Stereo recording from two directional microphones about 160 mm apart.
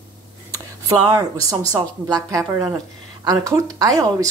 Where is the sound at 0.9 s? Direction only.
25° right (ahead or behind).